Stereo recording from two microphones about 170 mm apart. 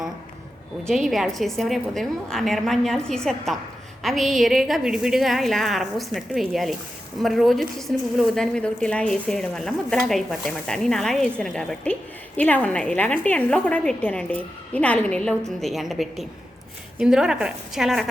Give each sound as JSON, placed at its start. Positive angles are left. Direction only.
{"t": 0.9, "sound": "a woman's voice", "side_deg": 0}